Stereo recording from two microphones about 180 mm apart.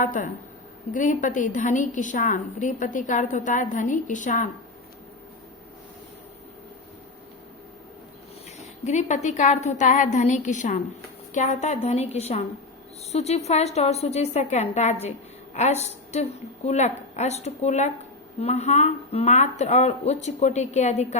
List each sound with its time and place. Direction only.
0.0 s a woman's voice: 45° left (ahead or behind)
8.6 s a woman's voice: 40° left (ahead or behind)